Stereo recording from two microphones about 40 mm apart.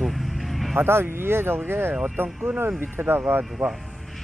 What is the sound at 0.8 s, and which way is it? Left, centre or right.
Speech, right.